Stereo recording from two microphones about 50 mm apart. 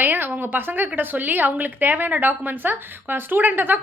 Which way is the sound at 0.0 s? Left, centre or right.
Right.